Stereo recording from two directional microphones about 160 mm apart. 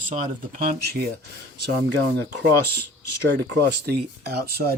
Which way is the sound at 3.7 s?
85° right.